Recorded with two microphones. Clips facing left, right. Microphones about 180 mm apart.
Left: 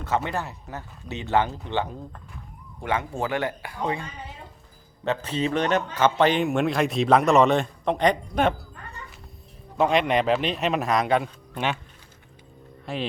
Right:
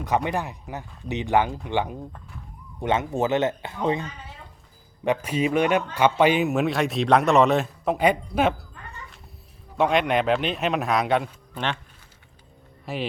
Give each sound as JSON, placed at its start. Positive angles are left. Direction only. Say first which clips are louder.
{"t": 0.0, "sound": "speech", "louder": "right 2 dB", "side_deg": -15}
{"t": 5.0, "sound": "a man's voice", "louder": "right 2 dB", "side_deg": -10}
{"t": 9.7, "sound": "a man's voice", "louder": "even", "side_deg": 0}
{"t": 12.8, "sound": "speech", "louder": "even", "side_deg": -5}